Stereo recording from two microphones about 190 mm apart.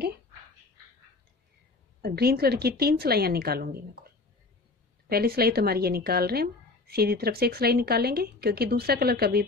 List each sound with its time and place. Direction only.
2.0 s a woman's voice: 55° right (ahead or behind)
5.1 s a woman's voice: 55° right (ahead or behind)